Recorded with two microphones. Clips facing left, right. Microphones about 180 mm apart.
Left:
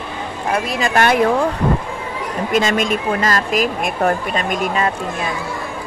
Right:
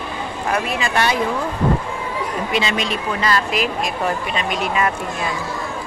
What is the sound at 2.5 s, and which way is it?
Speech, 45° left (ahead or behind).